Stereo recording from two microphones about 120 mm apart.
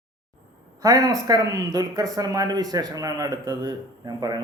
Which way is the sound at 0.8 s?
30° right (ahead or behind).